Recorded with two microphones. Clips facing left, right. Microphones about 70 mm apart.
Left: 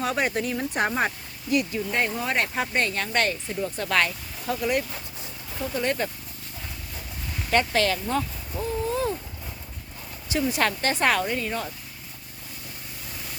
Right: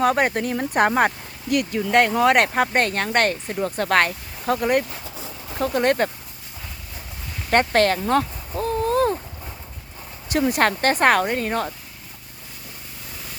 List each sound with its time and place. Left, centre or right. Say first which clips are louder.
0.0 s speech: right 6 dB; right
2.5 s speech: right 6 dB; right
5.5 s speech: right 7 dB; right
7.5 s a sound: right 5 dB; right
10.2 s speech: right 5 dB; right